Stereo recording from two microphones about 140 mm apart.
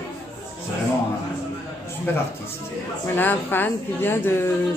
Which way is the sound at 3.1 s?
15° left (ahead or behind).